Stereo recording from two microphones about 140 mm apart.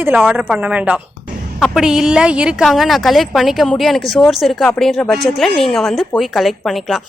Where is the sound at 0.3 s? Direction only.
10° right (ahead or behind).